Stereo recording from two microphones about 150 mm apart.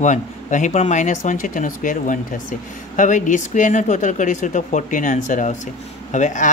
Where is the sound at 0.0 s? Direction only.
55° left (ahead or behind).